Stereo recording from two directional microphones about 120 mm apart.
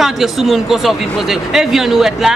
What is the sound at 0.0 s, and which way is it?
Speech, centre (ahead or behind).